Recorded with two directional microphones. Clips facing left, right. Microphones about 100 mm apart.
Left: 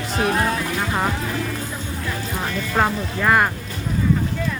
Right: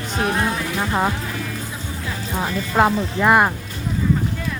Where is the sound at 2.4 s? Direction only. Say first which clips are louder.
Right 3 dB; 5° right (ahead or behind).